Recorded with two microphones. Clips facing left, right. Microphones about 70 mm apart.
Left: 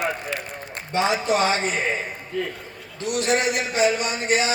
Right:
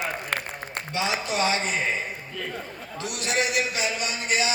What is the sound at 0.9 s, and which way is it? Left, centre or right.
Speech, left.